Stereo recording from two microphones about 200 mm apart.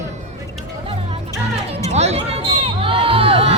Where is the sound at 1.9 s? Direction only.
30° right (ahead or behind).